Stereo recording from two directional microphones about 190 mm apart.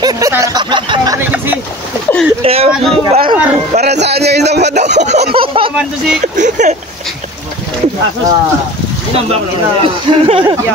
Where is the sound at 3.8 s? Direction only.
60° right (ahead or behind).